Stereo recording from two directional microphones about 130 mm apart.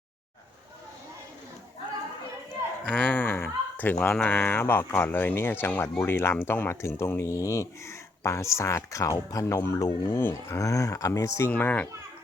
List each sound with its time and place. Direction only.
2.8 s speech: 10° left (ahead or behind)